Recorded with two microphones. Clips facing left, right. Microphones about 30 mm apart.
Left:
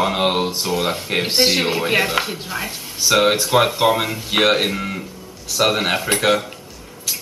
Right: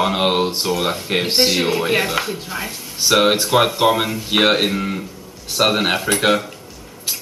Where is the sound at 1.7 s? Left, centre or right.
Centre.